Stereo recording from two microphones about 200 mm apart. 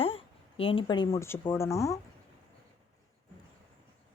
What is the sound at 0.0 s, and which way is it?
Speech, 30° left (ahead or behind).